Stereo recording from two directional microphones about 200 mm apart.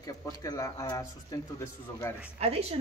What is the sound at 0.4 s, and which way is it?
Speech, 15° left (ahead or behind).